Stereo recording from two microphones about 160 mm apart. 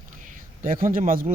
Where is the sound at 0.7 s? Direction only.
60° right (ahead or behind).